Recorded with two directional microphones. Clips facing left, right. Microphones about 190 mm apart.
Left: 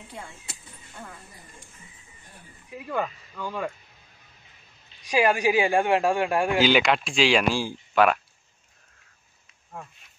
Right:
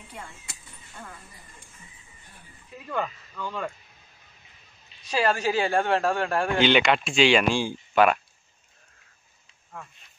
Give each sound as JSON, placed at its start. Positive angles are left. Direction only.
{"t": 2.7, "sound": "speech", "side_deg": 15}
{"t": 5.0, "sound": "speech", "side_deg": 15}
{"t": 6.6, "sound": "speech", "side_deg": 0}